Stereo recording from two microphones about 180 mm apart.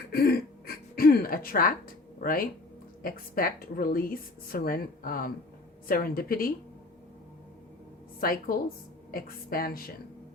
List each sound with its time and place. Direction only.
0.1 s gasp: 60° left (ahead or behind)
3.0 s speech: 55° left (ahead or behind)
8.2 s a woman's voice: 55° left (ahead or behind)